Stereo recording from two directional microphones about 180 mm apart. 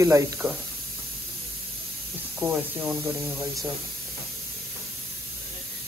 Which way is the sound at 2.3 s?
10° right (ahead or behind).